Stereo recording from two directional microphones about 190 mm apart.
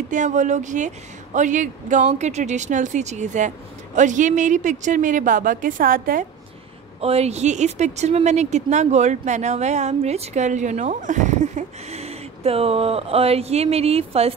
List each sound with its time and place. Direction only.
0.1 s a woman's voice: 40° right (ahead or behind)
7.0 s a woman's voice: 35° right (ahead or behind)